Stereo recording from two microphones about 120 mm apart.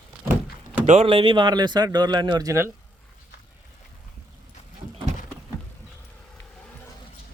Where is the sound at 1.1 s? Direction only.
45° right (ahead or behind); by 2.7 s 25° right (ahead or behind).